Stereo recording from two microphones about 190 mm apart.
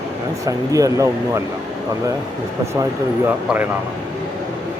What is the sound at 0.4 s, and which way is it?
Speech, 15° right (ahead or behind).